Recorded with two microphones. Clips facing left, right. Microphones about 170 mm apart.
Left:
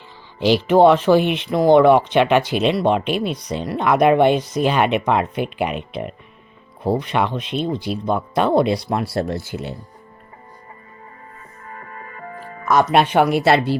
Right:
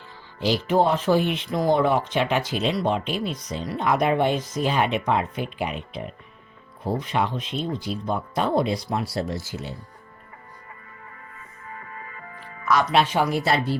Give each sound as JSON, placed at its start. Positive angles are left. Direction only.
{"t": 0.3, "sound": "speech", "side_deg": 70}
{"t": 11.6, "sound": "music", "side_deg": 45}